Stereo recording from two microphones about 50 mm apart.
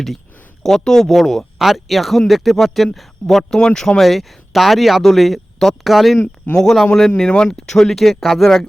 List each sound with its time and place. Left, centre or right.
0.6 s speech: centre
6.1 s speech: left
6.6 s speech: centre